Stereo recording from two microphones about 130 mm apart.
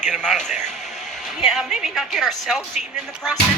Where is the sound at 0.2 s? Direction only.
5° left (ahead or behind).